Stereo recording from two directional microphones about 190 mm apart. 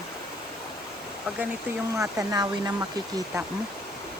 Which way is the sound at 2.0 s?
20° right (ahead or behind).